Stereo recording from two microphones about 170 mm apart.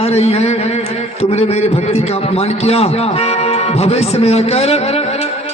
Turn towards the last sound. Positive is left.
turn(degrees=35)  # may be behind; listen again after turning